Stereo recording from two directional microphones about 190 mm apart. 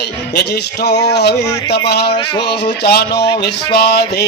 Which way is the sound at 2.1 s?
25° left (ahead or behind).